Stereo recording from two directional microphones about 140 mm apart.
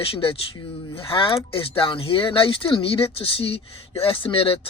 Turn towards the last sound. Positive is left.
turn(degrees=40)  # may be behind; listen again after turning